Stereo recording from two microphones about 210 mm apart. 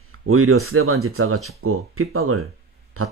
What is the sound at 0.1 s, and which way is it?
Speech, 90° right.